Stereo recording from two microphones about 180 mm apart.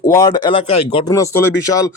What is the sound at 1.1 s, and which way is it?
Speech, 15° left (ahead or behind).